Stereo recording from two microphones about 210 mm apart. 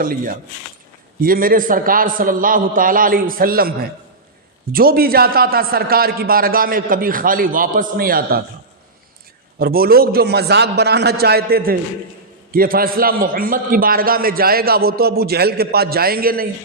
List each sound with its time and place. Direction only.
1.2 s a man's voice: 45° right (ahead or behind)
9.6 s a man's voice: 45° right (ahead or behind)